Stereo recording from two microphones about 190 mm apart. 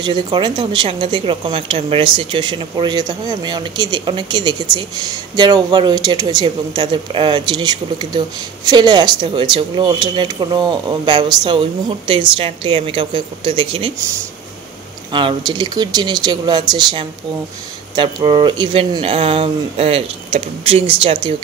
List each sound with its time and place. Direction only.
0.0 s a woman's voice: 25° right (ahead or behind)
15.1 s a woman's voice: 25° right (ahead or behind)